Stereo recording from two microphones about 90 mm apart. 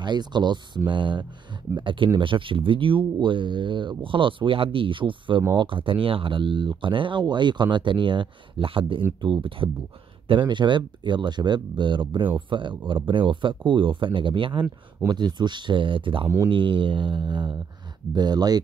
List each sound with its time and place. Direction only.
0.0 s speech: 55° right (ahead or behind)
15.0 s speech: 55° right (ahead or behind)
18.1 s speech: 50° right (ahead or behind)